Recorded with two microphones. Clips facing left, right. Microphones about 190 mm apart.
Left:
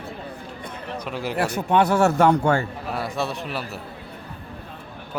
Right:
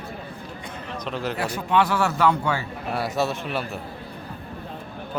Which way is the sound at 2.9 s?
Centre (ahead or behind).